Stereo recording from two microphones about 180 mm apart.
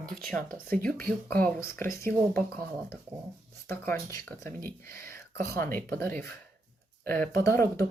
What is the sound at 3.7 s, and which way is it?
Speech, 10° left (ahead or behind).